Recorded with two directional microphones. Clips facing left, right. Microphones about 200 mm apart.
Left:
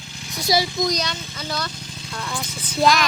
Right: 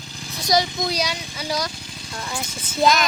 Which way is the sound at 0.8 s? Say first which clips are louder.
Left 1 dB; 10° right (ahead or behind).